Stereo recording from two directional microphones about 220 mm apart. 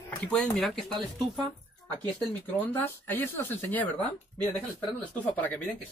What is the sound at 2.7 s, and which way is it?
Speech, 10° left (ahead or behind).